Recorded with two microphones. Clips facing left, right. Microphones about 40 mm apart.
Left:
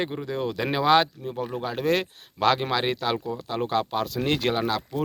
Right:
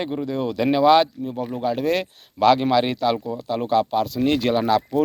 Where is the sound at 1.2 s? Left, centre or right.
Centre.